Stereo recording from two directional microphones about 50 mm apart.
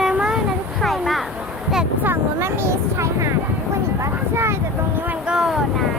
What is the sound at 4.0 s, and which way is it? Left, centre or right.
Speech, right.